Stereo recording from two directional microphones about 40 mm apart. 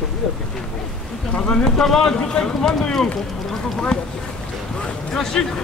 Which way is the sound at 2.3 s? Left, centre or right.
Left.